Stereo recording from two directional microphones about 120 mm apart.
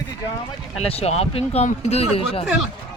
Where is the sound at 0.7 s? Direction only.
55° left (ahead or behind).